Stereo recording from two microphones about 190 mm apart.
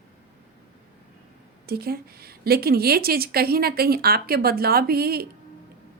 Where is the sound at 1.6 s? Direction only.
55° right (ahead or behind).